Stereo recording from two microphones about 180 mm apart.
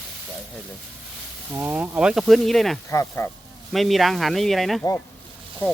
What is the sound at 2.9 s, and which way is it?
Speech, 15° left (ahead or behind).